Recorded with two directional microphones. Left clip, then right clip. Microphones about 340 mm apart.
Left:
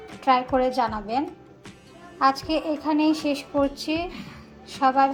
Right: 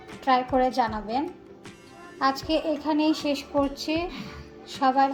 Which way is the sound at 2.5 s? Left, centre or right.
Centre.